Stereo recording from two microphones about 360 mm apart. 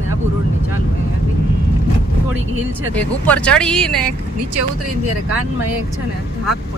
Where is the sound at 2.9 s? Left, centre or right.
Centre.